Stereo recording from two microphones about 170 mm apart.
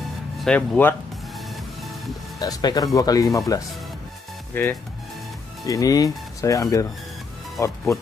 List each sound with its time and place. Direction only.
0.4 s speech: 10° left (ahead or behind)
1.5 s music: centre (ahead or behind)
2.3 s speech: 20° left (ahead or behind)
5.7 s speech: 20° left (ahead or behind)